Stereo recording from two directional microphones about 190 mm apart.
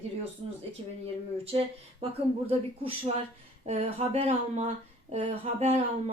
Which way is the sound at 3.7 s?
30° right (ahead or behind).